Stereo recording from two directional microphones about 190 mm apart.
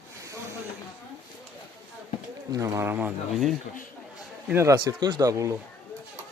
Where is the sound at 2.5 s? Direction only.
15° right (ahead or behind).